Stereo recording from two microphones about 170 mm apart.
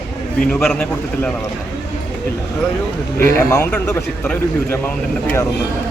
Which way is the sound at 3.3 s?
15° left (ahead or behind).